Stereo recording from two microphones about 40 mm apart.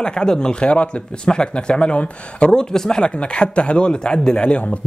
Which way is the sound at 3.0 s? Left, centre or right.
Left.